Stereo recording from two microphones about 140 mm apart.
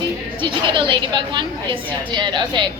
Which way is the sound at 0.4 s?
35° right (ahead or behind).